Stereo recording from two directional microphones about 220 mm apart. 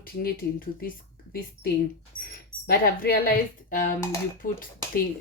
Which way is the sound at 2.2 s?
40° left (ahead or behind).